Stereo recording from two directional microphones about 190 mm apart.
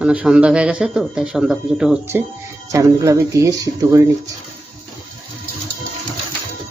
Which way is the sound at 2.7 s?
15° right (ahead or behind).